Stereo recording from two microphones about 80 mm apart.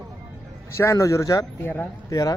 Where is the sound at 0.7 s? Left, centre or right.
Left.